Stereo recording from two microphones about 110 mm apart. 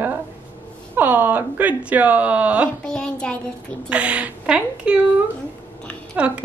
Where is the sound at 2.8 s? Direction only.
5° left (ahead or behind).